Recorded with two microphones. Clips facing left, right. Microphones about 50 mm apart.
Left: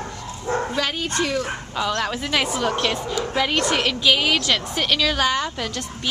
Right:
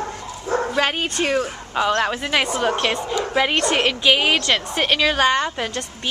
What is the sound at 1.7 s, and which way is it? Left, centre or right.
A woman's voice, right.